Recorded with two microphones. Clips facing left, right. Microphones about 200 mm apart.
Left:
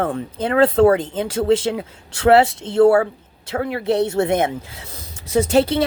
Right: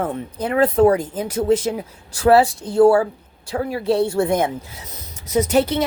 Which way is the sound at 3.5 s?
70° left (ahead or behind).